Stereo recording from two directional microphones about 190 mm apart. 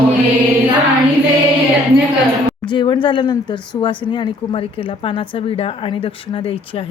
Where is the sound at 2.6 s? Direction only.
25° left (ahead or behind).